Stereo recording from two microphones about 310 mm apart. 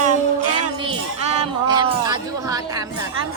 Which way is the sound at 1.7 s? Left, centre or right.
Centre.